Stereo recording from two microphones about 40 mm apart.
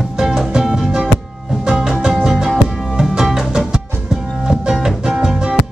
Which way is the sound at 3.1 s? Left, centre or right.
Centre.